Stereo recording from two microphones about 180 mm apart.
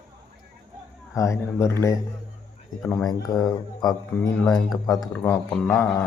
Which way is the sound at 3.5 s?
20° left (ahead or behind).